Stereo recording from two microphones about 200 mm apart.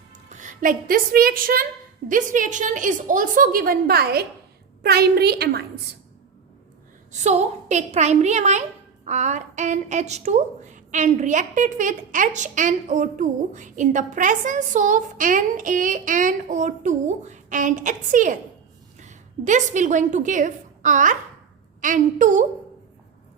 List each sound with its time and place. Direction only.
0.3 s a woman's voice: 40° right (ahead or behind)
7.1 s a woman's voice: 35° right (ahead or behind)